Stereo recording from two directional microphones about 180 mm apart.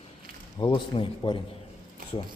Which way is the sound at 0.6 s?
25° left (ahead or behind).